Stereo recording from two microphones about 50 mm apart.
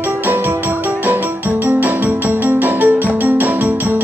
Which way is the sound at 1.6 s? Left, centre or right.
Right.